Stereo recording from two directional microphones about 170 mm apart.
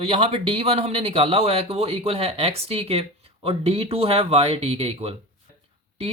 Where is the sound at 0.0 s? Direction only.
35° right (ahead or behind).